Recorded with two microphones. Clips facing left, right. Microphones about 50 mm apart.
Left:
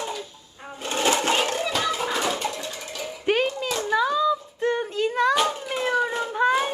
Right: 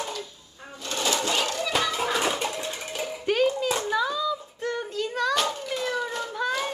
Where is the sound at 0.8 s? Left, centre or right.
Left.